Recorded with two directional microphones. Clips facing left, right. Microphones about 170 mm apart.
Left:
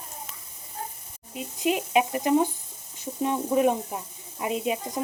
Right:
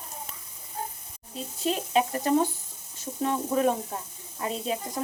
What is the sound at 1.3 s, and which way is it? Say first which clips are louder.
Speech: left 3 dB; 15° left (ahead or behind).